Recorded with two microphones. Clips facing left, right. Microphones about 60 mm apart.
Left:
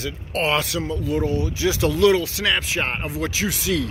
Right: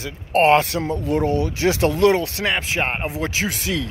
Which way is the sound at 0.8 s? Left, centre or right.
Right.